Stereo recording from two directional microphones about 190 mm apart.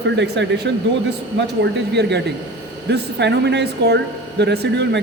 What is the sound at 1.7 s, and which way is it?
Speech, 60° right (ahead or behind).